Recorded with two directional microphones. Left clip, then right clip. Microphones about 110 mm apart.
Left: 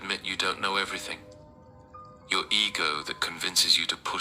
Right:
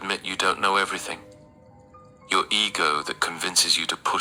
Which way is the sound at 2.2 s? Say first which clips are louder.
Right 4 dB; 50° right (ahead or behind).